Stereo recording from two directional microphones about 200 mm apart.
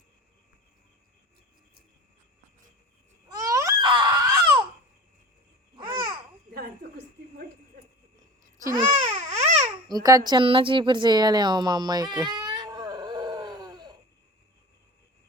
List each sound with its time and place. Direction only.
3.2 s a sound: 15° right (ahead or behind)
5.7 s babbling: 25° right (ahead or behind)
6.5 s a sound: 50° right (ahead or behind)
8.5 s babbling: 15° right (ahead or behind)
8.9 s baby cry: 30° right (ahead or behind)
9.9 s a woman's voice: 20° right (ahead or behind)
12.5 s baby cry: 20° right (ahead or behind)